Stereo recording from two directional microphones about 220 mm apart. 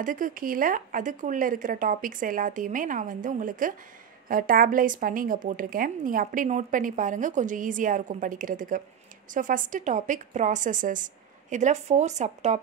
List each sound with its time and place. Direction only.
0.0 s a woman's voice: 40° right (ahead or behind)